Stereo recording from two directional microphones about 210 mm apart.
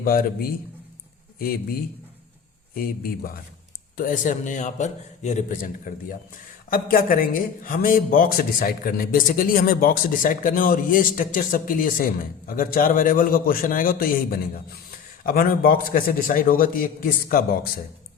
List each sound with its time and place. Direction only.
0.0 s a man's voice: 45° left (ahead or behind)
2.7 s speech: 45° left (ahead or behind)